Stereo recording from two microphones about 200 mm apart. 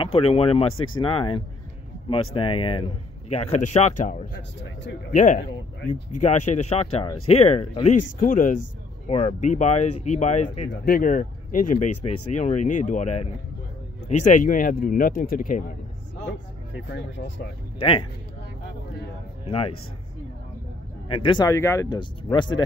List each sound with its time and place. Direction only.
0.0 s speech: 30° left (ahead or behind)
4.4 s speech: 65° left (ahead or behind)
5.1 s speech: 40° left (ahead or behind)
17.7 s speech: 25° left (ahead or behind)
19.4 s a man's voice: 30° left (ahead or behind)
21.1 s speech: 25° left (ahead or behind)